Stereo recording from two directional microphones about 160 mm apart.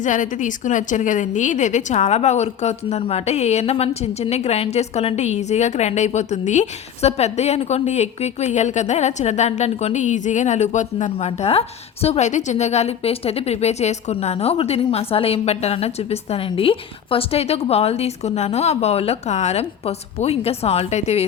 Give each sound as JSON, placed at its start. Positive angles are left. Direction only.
{"t": 0.0, "sound": "a woman's voice", "side_deg": 50}